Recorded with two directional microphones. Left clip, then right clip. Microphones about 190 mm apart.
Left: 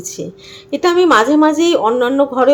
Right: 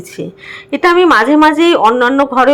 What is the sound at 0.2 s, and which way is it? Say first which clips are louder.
Speech: right 4 dB; 35° right (ahead or behind).